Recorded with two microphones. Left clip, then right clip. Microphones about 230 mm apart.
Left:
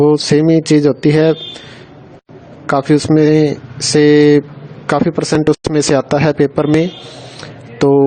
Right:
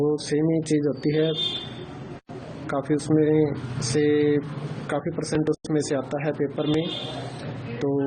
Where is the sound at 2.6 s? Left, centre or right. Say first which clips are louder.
Left 13 dB; left.